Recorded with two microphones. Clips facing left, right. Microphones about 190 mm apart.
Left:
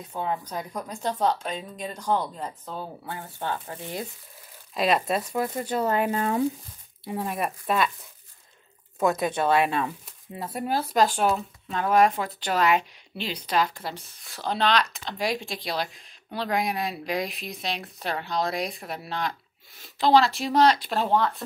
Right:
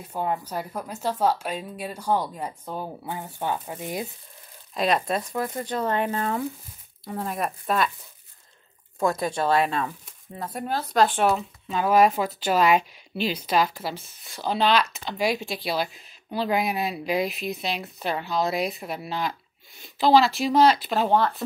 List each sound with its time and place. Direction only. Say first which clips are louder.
0.0 s speech: right 2 dB; 10° right (ahead or behind)
4.7 s speech: even; 5° left (ahead or behind)
7.1 s speech: even; 5° left (ahead or behind)
9.0 s speech: left 1 dB; 20° left (ahead or behind)
10.3 s speech: left 1 dB; 5° left (ahead or behind)